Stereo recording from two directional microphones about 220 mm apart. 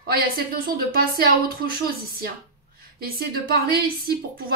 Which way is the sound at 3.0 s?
45° right (ahead or behind).